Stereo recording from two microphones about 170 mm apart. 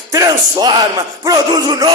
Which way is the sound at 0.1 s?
20° right (ahead or behind).